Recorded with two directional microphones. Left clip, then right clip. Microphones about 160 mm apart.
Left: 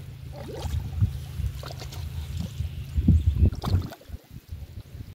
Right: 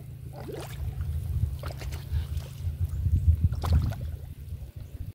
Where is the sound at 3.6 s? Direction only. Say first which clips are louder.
Left 2 dB; 15° right (ahead or behind).